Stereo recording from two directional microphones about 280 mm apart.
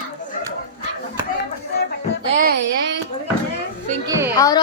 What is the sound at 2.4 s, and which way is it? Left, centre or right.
Speech, right.